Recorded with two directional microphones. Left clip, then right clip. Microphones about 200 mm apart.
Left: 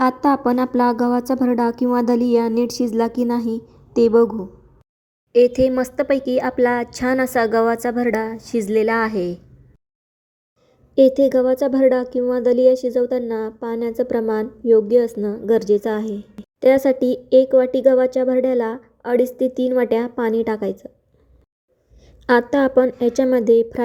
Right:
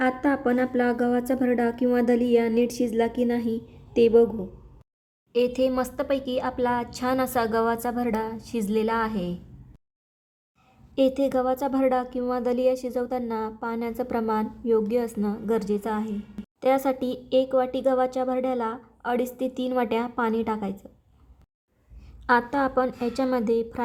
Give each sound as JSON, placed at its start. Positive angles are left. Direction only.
{"t": 0.0, "sound": "speech", "side_deg": 20}
{"t": 5.3, "sound": "a woman's voice", "side_deg": 15}
{"t": 10.9, "sound": "speech", "side_deg": 15}
{"t": 22.0, "sound": "a woman's voice", "side_deg": 20}